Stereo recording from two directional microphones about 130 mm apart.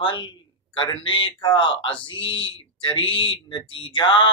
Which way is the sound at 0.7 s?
40° left (ahead or behind).